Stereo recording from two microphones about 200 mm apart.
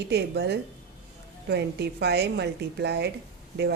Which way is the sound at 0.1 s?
55° right (ahead or behind).